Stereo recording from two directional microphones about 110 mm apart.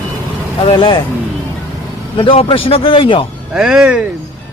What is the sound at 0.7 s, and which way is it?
Speech, 45° left (ahead or behind).